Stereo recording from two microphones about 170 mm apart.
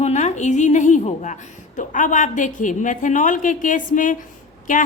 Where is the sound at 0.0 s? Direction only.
40° left (ahead or behind).